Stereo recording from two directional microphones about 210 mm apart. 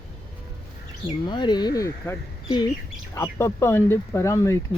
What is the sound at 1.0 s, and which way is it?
Speech, 20° left (ahead or behind).